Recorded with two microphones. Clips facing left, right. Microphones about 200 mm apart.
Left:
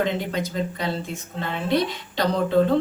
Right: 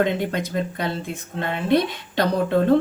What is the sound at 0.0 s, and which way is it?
Speech, 55° right (ahead or behind).